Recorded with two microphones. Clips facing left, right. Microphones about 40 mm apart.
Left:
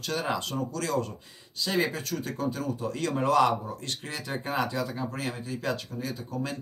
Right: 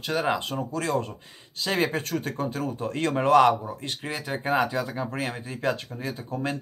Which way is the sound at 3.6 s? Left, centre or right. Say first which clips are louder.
Right 3 dB; right.